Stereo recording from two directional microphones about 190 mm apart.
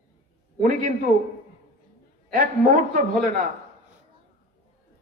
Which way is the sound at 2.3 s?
45° right (ahead or behind).